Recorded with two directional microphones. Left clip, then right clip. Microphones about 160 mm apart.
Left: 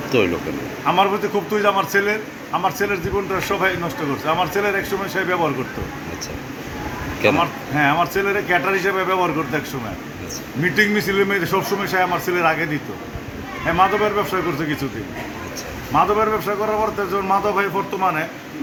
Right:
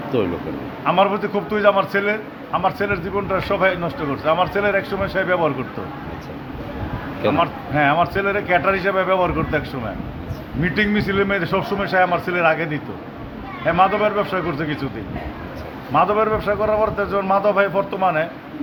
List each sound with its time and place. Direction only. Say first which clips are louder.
0.1 s speech: left 3 dB; 5° left (ahead or behind)
0.9 s a man's voice: even; 30° right (ahead or behind)
7.3 s a man's voice: right 1 dB; 30° right (ahead or behind)
10.6 s a man's voice: left 3 dB; 35° right (ahead or behind)
13.7 s a man's voice: right 1 dB; 35° right (ahead or behind)
16.0 s a man's voice: even; 35° right (ahead or behind)